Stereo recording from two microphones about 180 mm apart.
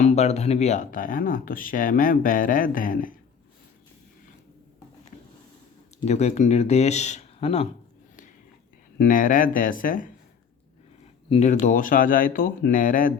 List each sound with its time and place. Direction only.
0.0 s speech: 35° left (ahead or behind)
6.1 s speech: 40° left (ahead or behind)
9.0 s speech: 50° left (ahead or behind)
11.3 s speech: 40° left (ahead or behind)